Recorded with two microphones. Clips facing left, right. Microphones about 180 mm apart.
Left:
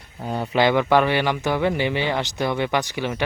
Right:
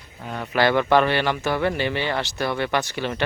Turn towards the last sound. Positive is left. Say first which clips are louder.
# left 1 dB
turn(degrees=10)  # may be behind; listen again after turning